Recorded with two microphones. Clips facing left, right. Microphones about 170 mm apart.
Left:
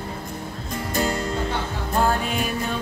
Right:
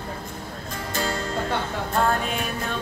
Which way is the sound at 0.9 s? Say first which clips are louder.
Left 4 dB; 15° left (ahead or behind).